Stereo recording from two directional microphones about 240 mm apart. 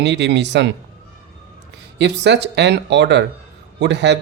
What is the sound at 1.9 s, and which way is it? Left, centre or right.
Speech, right.